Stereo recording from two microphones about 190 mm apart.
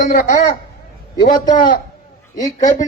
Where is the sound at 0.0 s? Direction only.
45° left (ahead or behind).